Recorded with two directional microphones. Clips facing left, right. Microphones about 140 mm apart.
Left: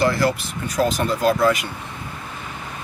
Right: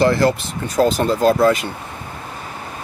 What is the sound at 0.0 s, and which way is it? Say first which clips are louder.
Speech: right 4 dB; 25° right (ahead or behind).